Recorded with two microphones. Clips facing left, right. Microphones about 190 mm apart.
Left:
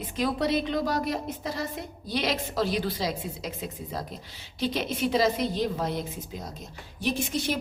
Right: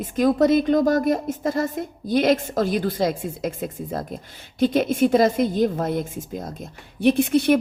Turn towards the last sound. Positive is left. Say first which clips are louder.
# right 11 dB
turn(degrees=-60)  # may be behind; listen again after turning